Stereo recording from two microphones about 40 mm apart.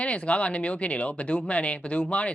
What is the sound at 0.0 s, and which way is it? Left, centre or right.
Speech, left.